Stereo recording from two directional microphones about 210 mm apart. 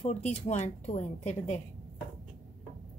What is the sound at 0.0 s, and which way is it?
A woman's voice, 30° left (ahead or behind).